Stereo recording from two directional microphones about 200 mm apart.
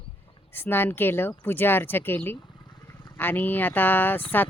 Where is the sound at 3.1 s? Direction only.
10° left (ahead or behind).